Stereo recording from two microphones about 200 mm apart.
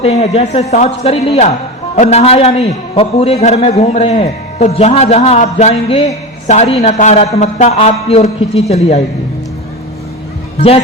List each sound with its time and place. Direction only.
0.0 s a man's voice: 30° left (ahead or behind)